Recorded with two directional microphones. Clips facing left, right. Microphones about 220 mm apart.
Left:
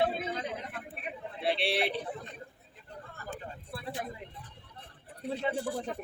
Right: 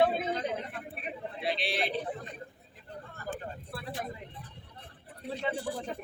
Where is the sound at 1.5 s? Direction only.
65° left (ahead or behind).